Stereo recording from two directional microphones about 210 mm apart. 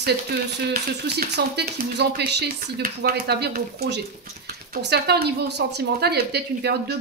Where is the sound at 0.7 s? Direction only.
50° right (ahead or behind).